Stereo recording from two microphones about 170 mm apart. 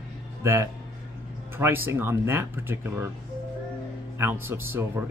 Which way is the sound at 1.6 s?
15° right (ahead or behind).